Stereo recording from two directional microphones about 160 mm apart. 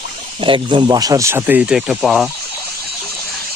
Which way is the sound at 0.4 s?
30° right (ahead or behind).